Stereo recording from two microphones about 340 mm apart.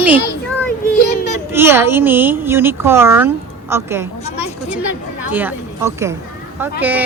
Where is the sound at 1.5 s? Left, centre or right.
Centre.